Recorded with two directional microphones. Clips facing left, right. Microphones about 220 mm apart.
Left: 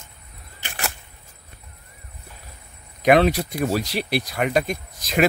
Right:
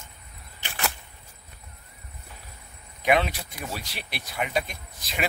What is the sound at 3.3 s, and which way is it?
Speech, 40° left (ahead or behind).